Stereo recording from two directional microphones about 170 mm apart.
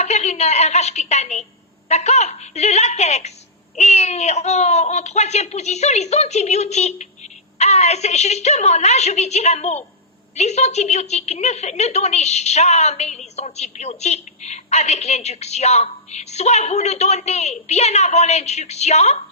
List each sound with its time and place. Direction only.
0.0 s a woman's voice: 40° left (ahead or behind)